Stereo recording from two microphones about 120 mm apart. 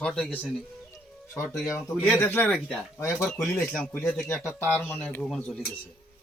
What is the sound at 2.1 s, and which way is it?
Speech, 15° left (ahead or behind).